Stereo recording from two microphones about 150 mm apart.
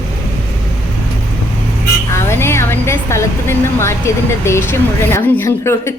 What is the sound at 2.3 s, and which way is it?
A woman's voice, 15° left (ahead or behind).